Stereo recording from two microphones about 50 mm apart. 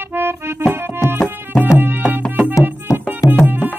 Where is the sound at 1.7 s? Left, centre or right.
Right.